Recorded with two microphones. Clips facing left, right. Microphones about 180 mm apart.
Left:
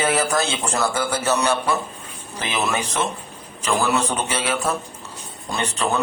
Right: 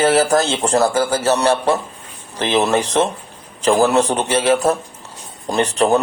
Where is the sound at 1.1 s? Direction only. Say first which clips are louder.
Right 5 dB; 35° right (ahead or behind).